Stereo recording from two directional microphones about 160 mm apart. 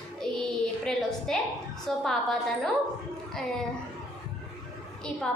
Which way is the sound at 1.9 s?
5° left (ahead or behind).